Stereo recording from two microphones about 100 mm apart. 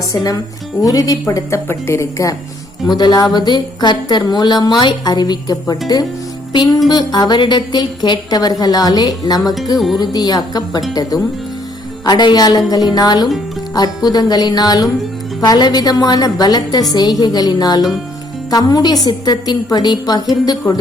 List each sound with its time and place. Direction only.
0.1 s speech: 35° left (ahead or behind)
2.8 s speech: 45° left (ahead or behind)
6.5 s music: 50° left (ahead or behind)
6.9 s speech: 45° left (ahead or behind)
9.4 s music: centre (ahead or behind)
10.0 s speech: 40° left (ahead or behind)
12.0 s speech: 45° left (ahead or behind)